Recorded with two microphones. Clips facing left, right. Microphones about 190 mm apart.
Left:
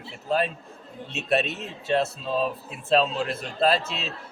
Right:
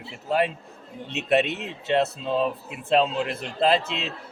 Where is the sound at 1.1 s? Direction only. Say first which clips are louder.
Right 3 dB; 15° right (ahead or behind).